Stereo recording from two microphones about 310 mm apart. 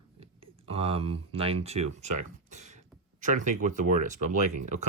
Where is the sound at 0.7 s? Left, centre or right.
Centre.